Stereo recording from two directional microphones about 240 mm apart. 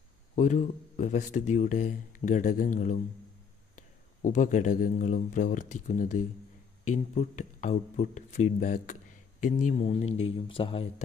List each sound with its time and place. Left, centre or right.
0.4 s speech: left
10.0 s speech: left
10.3 s speech: left